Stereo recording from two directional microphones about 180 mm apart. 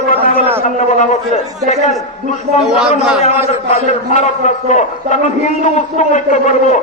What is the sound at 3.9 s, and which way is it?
A man's voice, 40° left (ahead or behind).